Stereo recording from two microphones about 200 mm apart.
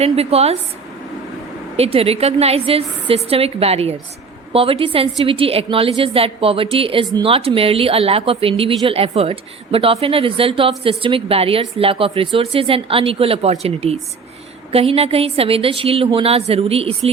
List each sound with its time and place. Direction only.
0.0 s a woman's voice: 30° right (ahead or behind)
1.7 s a woman's voice: 30° right (ahead or behind)